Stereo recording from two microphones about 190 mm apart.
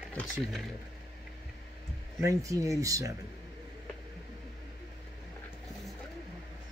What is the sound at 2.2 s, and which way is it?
Speech, 15° right (ahead or behind).